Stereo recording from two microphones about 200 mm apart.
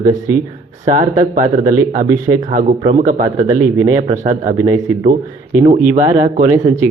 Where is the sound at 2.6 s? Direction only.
40° right (ahead or behind).